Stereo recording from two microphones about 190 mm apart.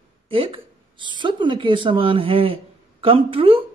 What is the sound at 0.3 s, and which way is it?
Speech, 30° right (ahead or behind).